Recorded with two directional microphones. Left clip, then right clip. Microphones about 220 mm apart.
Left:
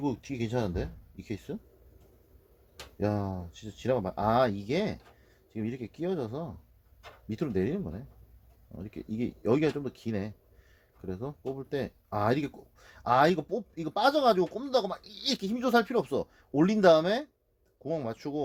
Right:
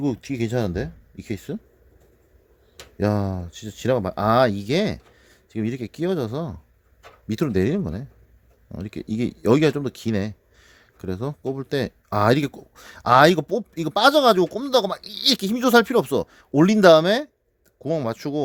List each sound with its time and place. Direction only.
0.0 s speech: 50° right (ahead or behind)
3.0 s speech: 50° right (ahead or behind)